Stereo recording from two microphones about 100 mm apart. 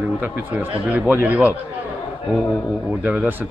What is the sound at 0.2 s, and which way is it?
Speech, 15° right (ahead or behind).